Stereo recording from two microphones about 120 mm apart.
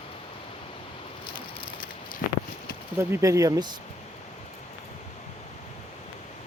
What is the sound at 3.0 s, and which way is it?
Speech, 20° right (ahead or behind).